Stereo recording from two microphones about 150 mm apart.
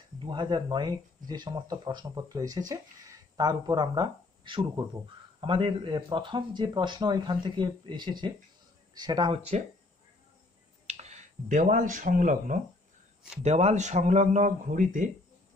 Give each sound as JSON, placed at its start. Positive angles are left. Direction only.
{"t": 0.2, "sound": "speech", "side_deg": -30}
{"t": 10.9, "sound": "speech", "side_deg": -50}
{"t": 13.4, "sound": "speech", "side_deg": -45}